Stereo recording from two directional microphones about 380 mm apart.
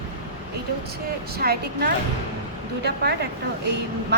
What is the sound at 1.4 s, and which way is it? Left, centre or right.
Speech, right.